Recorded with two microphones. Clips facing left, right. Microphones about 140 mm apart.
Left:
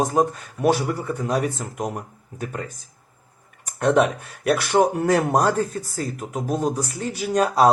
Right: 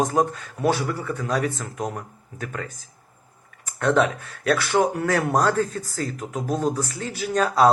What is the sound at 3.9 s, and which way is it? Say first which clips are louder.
Speech: left 2 dB; 15° left (ahead or behind).